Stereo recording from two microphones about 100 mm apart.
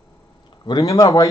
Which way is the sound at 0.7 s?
35° left (ahead or behind).